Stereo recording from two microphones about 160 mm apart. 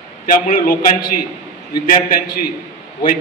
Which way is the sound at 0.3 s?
60° left (ahead or behind).